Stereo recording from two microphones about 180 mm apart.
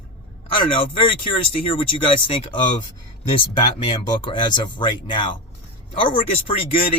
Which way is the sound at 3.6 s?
30° left (ahead or behind).